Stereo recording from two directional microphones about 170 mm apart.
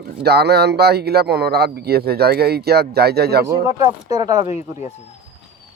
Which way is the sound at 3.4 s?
20° right (ahead or behind).